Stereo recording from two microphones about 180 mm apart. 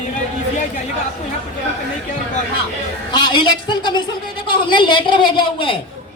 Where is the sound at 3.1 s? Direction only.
25° left (ahead or behind).